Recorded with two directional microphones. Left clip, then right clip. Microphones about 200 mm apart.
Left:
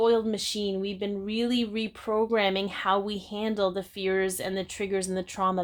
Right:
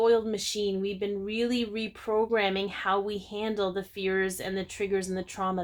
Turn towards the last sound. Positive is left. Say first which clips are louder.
# left 4 dB
turn(degrees=30)  # may be behind; listen again after turning